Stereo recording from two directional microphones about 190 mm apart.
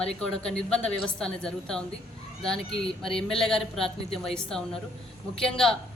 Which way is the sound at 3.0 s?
30° left (ahead or behind).